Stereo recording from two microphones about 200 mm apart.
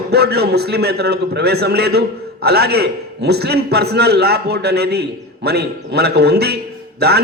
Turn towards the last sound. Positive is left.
turn(degrees=-55)  # may be behind; listen again after turning